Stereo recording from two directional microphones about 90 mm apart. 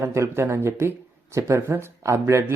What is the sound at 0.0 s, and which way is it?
Speech, 30° right (ahead or behind).